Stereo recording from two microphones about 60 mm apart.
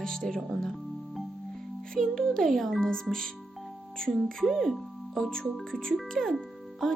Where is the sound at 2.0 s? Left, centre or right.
Centre.